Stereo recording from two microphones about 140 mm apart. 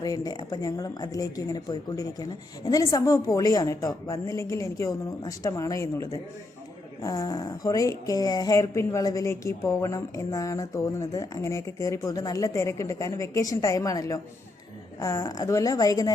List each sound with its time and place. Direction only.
0.0 s speech: 25° left (ahead or behind)